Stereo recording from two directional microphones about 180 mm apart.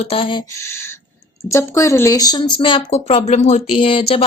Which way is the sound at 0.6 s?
15° left (ahead or behind).